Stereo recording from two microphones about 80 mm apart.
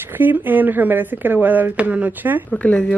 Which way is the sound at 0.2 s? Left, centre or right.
Right.